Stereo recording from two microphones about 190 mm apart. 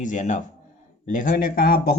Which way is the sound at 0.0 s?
40° left (ahead or behind).